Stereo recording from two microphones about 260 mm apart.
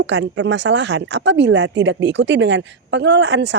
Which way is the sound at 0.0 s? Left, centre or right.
Right.